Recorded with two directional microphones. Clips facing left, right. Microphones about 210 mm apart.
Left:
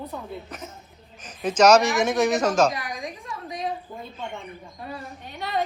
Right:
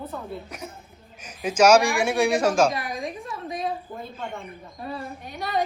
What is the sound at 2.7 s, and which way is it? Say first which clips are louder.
Speech: right 3 dB; 30° right (ahead or behind).